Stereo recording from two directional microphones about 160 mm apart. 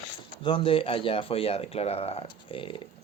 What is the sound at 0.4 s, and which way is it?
Speech, 35° left (ahead or behind).